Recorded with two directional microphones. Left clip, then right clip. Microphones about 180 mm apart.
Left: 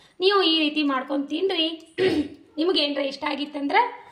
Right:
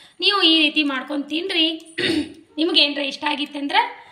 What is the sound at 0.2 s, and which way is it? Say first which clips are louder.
A woman's voice: right 4 dB; 45° left (ahead or behind).